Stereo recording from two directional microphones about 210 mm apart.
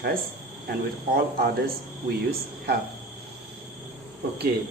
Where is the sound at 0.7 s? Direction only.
45° right (ahead or behind).